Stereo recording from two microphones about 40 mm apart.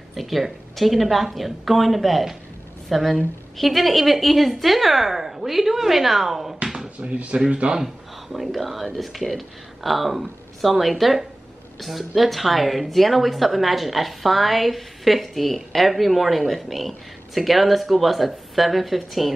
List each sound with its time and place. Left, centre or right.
0.1 s a woman's voice: centre
7.0 s speech: right
7.7 s a woman's voice: centre